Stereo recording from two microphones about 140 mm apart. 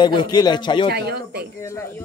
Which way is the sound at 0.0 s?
35° left (ahead or behind).